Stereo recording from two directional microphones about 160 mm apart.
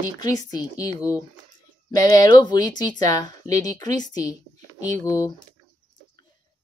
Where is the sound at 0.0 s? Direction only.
20° left (ahead or behind).